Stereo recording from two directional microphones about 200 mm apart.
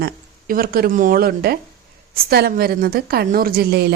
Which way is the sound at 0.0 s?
45° right (ahead or behind).